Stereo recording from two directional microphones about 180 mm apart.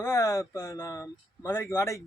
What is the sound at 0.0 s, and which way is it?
Speech, 15° left (ahead or behind).